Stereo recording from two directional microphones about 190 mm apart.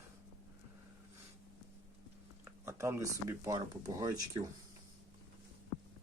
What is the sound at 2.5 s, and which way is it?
A man's voice, 15° right (ahead or behind).